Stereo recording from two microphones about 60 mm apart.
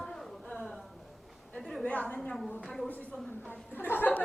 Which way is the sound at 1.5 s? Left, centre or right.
Centre.